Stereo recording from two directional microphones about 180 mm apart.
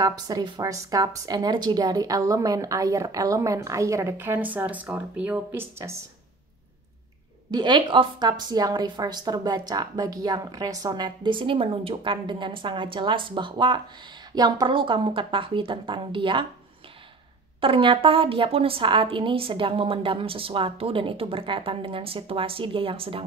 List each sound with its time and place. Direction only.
0.0 s speech: 20° right (ahead or behind)
7.5 s a woman's voice: 25° right (ahead or behind)
17.6 s a woman's voice: 30° right (ahead or behind)